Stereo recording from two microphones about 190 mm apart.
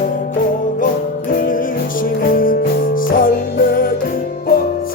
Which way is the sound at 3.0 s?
45° left (ahead or behind).